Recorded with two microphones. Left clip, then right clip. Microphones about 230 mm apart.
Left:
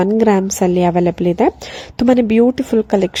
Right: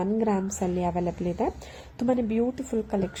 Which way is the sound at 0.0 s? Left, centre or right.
Left.